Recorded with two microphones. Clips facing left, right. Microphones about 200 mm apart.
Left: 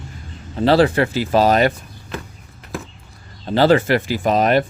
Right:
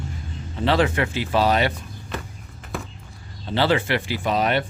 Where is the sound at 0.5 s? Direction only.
40° left (ahead or behind).